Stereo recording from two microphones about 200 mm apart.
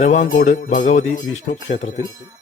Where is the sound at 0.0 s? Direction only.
35° left (ahead or behind).